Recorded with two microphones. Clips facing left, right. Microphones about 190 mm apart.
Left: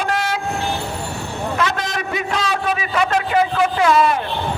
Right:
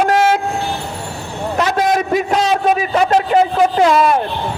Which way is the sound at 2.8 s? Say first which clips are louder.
Right 5 dB; 40° right (ahead or behind).